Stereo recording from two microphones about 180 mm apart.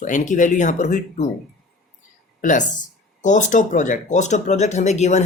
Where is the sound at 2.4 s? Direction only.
45° left (ahead or behind).